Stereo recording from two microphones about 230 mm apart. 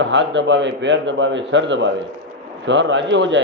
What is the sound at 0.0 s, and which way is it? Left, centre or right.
A man's voice, right.